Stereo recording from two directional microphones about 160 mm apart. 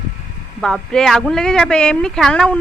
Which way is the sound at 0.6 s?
5° left (ahead or behind).